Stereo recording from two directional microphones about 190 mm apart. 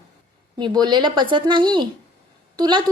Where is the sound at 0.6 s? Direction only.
25° right (ahead or behind).